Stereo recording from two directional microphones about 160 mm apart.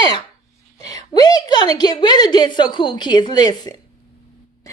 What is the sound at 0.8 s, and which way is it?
A woman's voice, 25° left (ahead or behind).